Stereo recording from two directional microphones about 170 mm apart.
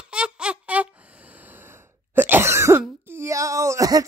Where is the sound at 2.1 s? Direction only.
15° right (ahead or behind).